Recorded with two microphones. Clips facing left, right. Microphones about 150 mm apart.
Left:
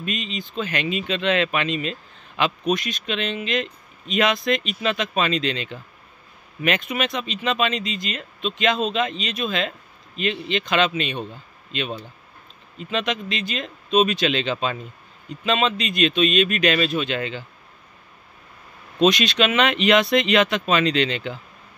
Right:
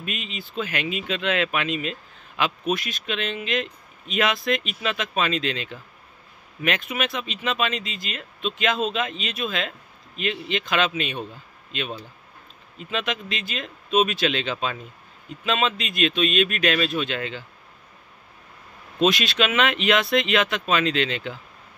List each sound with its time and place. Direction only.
0.0 s speech: 5° right (ahead or behind)
18.9 s speech: 5° right (ahead or behind)